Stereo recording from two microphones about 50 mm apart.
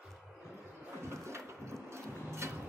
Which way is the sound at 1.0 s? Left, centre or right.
Right.